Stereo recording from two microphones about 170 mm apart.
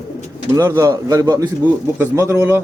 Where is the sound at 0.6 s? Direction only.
20° right (ahead or behind).